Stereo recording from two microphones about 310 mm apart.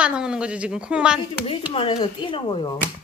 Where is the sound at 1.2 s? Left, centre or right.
Centre.